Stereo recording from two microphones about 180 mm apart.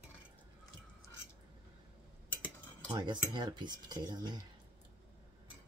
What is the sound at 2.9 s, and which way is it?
Cutlery, 25° right (ahead or behind).